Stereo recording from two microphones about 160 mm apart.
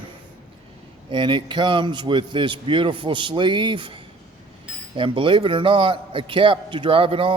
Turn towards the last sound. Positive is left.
turn(degrees=-35)  # may be behind; listen again after turning